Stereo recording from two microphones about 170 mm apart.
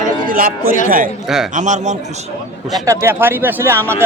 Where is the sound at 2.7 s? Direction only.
20° right (ahead or behind).